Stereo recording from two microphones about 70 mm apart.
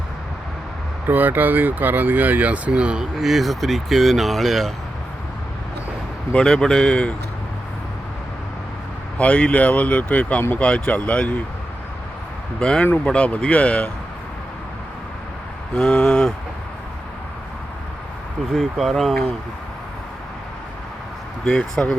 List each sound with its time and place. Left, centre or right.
1.0 s speech: right
3.0 s speech: centre
6.3 s speech: centre
9.1 s speech: centre
12.5 s speech: centre
15.7 s a sound: centre
18.5 s speech: centre
21.4 s speech: centre